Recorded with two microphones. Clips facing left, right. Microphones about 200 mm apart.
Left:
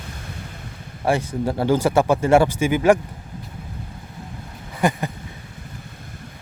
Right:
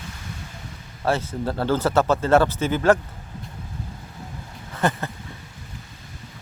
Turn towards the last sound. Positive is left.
turn(degrees=15)  # may be behind; listen again after turning